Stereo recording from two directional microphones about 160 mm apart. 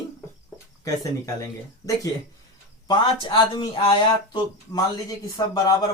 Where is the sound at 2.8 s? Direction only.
25° left (ahead or behind).